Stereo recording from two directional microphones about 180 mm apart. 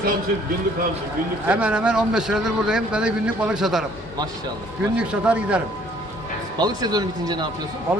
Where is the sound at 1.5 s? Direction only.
5° right (ahead or behind).